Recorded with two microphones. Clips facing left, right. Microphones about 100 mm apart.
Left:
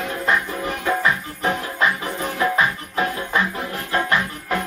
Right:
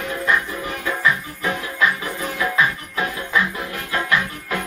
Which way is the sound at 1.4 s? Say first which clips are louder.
Left 3 dB; 30° left (ahead or behind).